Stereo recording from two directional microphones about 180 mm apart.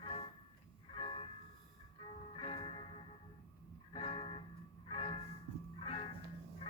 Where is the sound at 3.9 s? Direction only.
30° left (ahead or behind).